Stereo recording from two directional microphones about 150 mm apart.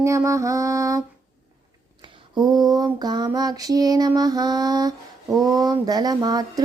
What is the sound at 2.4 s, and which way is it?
Mantra, 25° right (ahead or behind).